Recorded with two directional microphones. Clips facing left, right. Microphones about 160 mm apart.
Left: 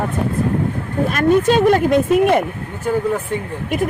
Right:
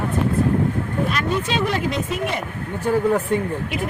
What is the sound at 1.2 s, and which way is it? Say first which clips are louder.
Speech: left 9 dB; 50° left (ahead or behind).